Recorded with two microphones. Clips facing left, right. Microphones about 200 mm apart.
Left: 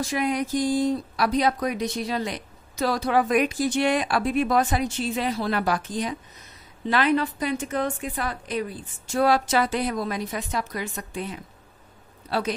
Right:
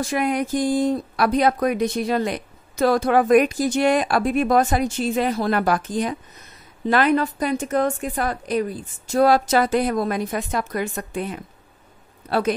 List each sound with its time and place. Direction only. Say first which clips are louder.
0.0 s speech: right 3 dB; 55° right (ahead or behind)